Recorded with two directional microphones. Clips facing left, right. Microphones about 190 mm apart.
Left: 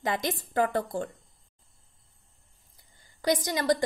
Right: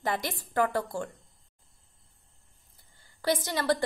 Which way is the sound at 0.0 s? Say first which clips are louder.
Left 2 dB; 20° left (ahead or behind).